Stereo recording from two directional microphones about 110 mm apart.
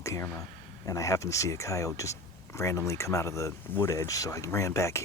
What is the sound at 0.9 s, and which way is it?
Speech, 30° left (ahead or behind).